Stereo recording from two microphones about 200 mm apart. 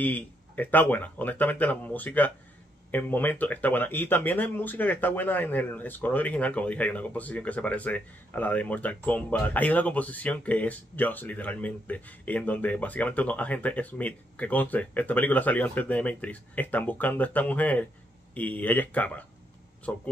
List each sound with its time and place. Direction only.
0.0 s speech: 10° left (ahead or behind)